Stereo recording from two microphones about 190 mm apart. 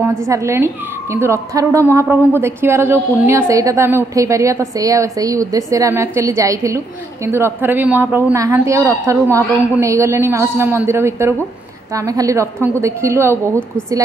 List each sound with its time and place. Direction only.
0.0 s a woman's voice: 15° right (ahead or behind)